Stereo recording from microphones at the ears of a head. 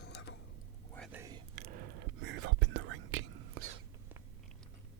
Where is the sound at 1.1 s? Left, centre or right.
Right.